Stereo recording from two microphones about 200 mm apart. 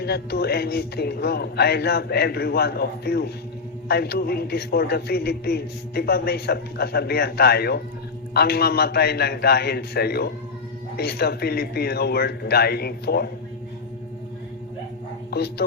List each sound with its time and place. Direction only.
0.0 s a man's voice: 55° left (ahead or behind)
15.3 s speech: 55° left (ahead or behind)